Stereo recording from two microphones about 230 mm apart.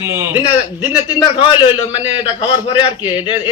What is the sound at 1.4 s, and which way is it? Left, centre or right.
Speech, left.